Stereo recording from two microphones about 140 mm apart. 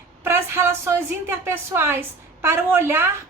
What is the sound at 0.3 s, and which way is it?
A woman's voice, 20° right (ahead or behind).